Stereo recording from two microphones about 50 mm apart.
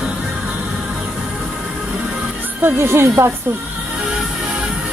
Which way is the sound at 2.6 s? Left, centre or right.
Right.